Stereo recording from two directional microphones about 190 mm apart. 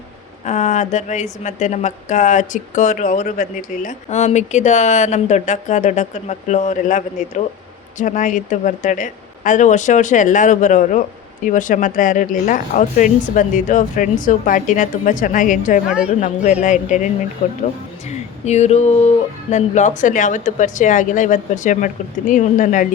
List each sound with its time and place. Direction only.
0.4 s speech: 40° left (ahead or behind)